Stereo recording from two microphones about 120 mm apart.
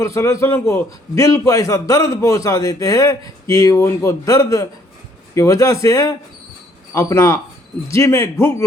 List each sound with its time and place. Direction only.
0.0 s a man's voice: 25° left (ahead or behind)